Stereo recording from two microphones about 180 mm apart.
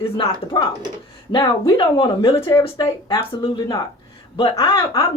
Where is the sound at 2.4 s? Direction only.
15° left (ahead or behind).